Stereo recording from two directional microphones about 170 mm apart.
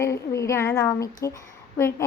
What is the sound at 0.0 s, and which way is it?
A woman's voice, 15° left (ahead or behind).